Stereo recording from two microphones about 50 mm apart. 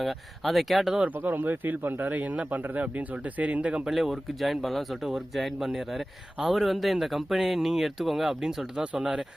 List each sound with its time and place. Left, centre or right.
0.0 s speech: centre
1.2 s speech: right
3.8 s speech: centre